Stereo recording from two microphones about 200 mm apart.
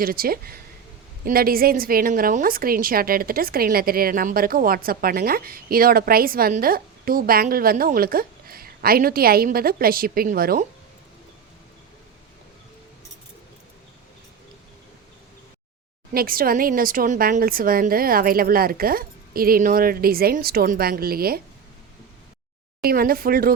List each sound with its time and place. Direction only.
0.0 s a woman's voice: 45° right (ahead or behind)
16.1 s a woman's voice: 45° right (ahead or behind)
22.8 s a woman's voice: 50° right (ahead or behind)